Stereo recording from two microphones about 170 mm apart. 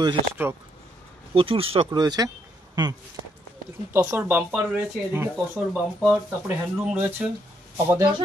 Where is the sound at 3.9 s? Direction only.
10° right (ahead or behind).